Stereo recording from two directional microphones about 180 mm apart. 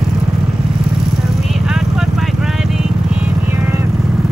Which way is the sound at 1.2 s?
Centre (ahead or behind).